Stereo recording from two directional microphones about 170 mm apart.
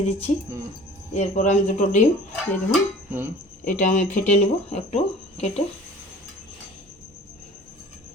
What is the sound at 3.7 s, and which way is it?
Speech, 45° left (ahead or behind).